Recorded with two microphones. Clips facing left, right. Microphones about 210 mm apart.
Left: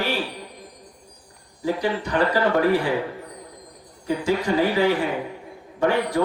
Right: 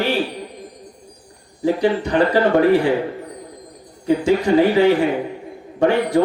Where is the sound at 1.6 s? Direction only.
30° right (ahead or behind).